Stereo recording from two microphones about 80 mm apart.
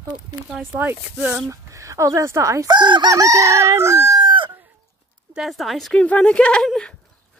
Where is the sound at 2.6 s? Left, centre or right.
Right.